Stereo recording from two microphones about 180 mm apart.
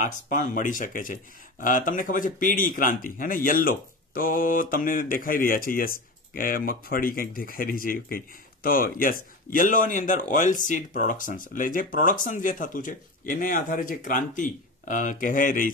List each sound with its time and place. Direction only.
0.0 s speech: 45° left (ahead or behind)